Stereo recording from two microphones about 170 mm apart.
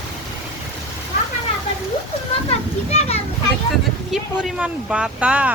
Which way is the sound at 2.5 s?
40° left (ahead or behind).